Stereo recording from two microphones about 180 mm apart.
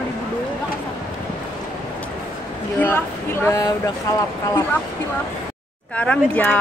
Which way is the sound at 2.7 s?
10° left (ahead or behind).